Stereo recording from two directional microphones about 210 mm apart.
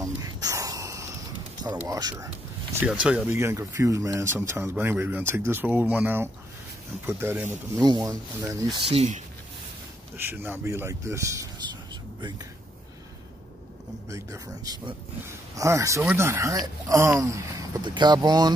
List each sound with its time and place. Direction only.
0.0 s a sound: 15° right (ahead or behind)
1.9 s speech: 20° right (ahead or behind)
2.7 s speech: 5° right (ahead or behind); by 9.2 s 30° right (ahead or behind)
10.1 s speech: 10° right (ahead or behind)
14.0 s speech: 15° right (ahead or behind)